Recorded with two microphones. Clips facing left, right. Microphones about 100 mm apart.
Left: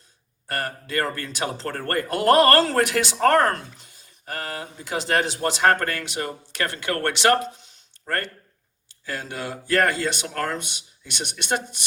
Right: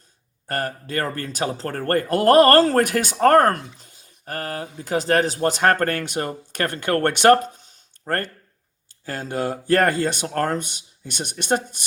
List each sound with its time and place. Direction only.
0.4 s speech: 40° right (ahead or behind)
3.8 s a sound: 40° right (ahead or behind)
4.8 s speech: 40° right (ahead or behind)